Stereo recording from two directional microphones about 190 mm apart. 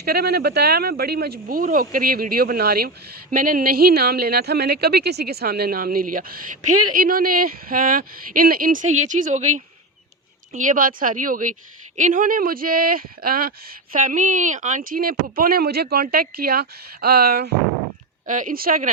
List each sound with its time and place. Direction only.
0.0 s speech: 55° right (ahead or behind)
18.3 s speech: 45° right (ahead or behind)